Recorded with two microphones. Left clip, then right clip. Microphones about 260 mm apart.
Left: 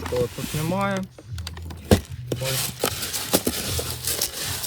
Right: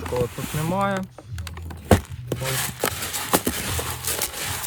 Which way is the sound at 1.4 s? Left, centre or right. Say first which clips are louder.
Left 1 dB; centre.